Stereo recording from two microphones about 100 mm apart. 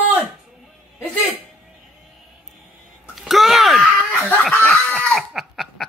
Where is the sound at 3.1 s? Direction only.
Centre (ahead or behind).